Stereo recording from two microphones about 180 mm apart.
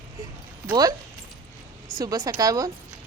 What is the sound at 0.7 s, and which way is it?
Speech, 20° right (ahead or behind).